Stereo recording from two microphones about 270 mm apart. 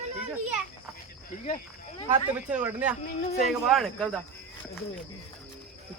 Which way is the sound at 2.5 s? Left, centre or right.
Centre.